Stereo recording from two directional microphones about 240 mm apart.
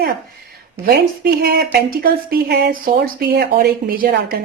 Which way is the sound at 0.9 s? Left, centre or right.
Right.